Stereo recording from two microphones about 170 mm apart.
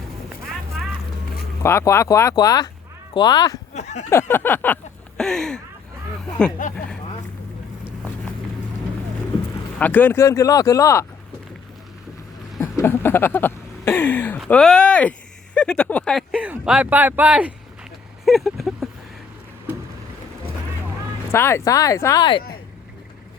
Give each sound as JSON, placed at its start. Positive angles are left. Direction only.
{"t": 1.6, "sound": "speech", "side_deg": 15}
{"t": 3.8, "sound": "a sound", "side_deg": 40}
{"t": 4.1, "sound": "speech", "side_deg": 15}
{"t": 6.6, "sound": "speech", "side_deg": 50}
{"t": 9.7, "sound": "speech", "side_deg": 10}
{"t": 12.5, "sound": "a sound", "side_deg": 15}
{"t": 15.5, "sound": "speech", "side_deg": 5}
{"t": 16.3, "sound": "speech", "side_deg": -10}
{"t": 18.3, "sound": "a sound", "side_deg": 0}
{"t": 21.3, "sound": "speech", "side_deg": 15}